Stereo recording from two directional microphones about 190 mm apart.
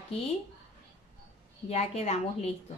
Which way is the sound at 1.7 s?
35° left (ahead or behind).